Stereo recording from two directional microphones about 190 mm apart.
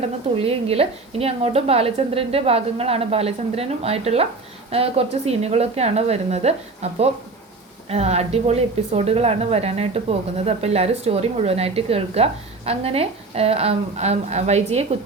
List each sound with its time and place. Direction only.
0.3 s a woman's voice: 30° right (ahead or behind)